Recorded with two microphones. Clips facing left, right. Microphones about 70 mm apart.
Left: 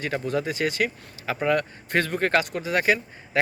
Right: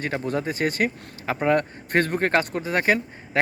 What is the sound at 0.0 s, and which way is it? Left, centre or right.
A man's voice, right.